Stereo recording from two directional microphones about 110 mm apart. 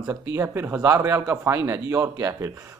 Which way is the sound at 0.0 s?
25° right (ahead or behind).